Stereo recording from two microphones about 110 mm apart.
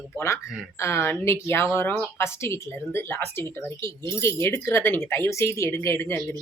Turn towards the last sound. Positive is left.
turn(degrees=20)  # may be behind; listen again after turning